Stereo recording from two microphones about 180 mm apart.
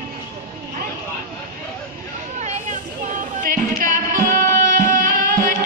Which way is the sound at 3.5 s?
50° right (ahead or behind).